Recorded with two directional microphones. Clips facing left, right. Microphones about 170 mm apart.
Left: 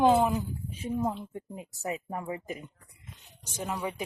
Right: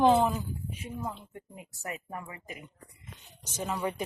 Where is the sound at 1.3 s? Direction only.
30° left (ahead or behind).